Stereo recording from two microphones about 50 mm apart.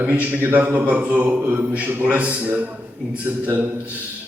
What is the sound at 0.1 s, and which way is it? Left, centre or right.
Speech, right.